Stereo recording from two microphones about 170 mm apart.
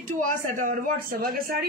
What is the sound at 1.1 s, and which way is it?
Speech, 60° right (ahead or behind).